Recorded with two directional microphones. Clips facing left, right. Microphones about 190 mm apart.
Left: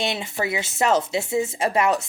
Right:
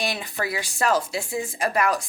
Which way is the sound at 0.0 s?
25° left (ahead or behind).